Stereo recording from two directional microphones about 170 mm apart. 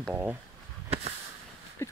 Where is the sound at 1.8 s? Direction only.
15° left (ahead or behind).